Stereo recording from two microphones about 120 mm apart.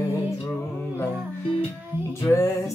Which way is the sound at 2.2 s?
20° left (ahead or behind).